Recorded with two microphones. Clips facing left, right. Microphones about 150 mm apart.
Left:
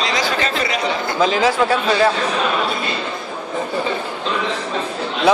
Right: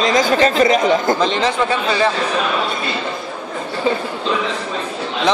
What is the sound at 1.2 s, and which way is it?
Speech, 5° left (ahead or behind).